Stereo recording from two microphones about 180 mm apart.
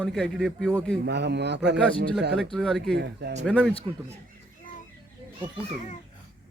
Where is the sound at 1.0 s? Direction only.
70° right (ahead or behind).